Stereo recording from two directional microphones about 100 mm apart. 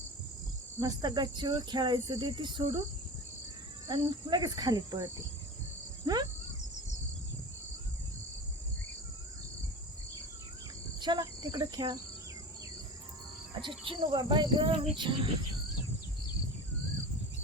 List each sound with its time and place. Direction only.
0.8 s speech: 40° right (ahead or behind)
3.8 s speech: 45° right (ahead or behind)
11.0 s cricket: 45° right (ahead or behind)
13.6 s speech: 55° right (ahead or behind)